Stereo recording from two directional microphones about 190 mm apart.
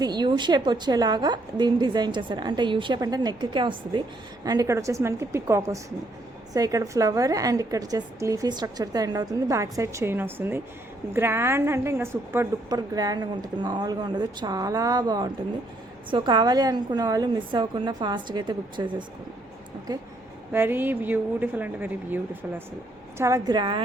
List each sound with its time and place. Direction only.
0.0 s a woman's voice: 20° right (ahead or behind)